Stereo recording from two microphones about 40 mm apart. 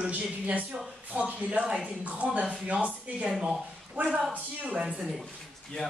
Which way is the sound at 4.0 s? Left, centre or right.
Right.